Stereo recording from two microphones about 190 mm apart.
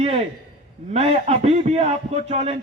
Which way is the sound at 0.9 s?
35° right (ahead or behind).